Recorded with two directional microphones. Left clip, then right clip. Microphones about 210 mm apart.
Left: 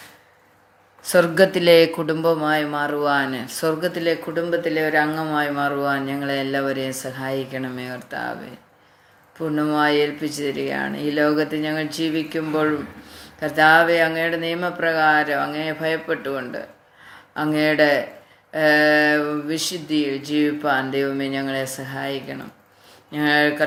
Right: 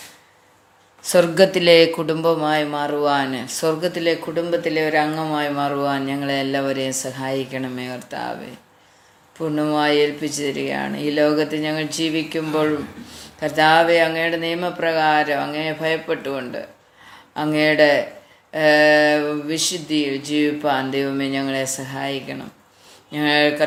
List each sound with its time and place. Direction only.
1.0 s speech: 5° left (ahead or behind)
9.4 s speech: 5° left (ahead or behind)